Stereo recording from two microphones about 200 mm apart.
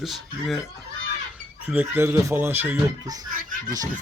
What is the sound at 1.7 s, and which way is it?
Speech, 10° right (ahead or behind).